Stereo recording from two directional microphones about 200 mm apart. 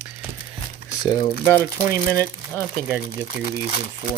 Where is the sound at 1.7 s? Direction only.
15° right (ahead or behind).